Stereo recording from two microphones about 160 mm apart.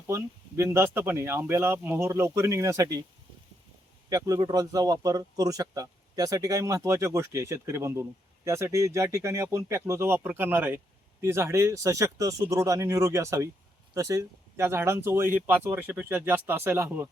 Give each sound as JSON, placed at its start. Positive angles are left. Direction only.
{"t": 0.1, "sound": "speech", "side_deg": -15}
{"t": 4.1, "sound": "speech", "side_deg": -25}